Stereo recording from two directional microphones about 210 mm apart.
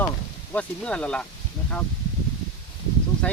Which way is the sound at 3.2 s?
5° left (ahead or behind).